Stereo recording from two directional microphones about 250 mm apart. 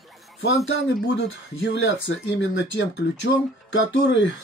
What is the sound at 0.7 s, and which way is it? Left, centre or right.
Speech, left.